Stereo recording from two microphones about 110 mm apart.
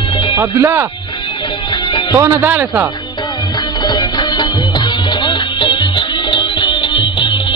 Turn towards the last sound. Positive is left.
turn(degrees=45)  # may be behind; listen again after turning